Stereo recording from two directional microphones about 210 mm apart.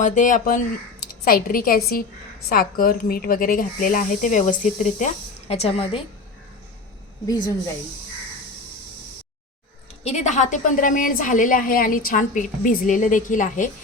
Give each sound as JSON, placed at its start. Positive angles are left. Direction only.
{"t": 0.0, "sound": "a woman's voice", "side_deg": 35}
{"t": 10.0, "sound": "a woman's voice", "side_deg": 30}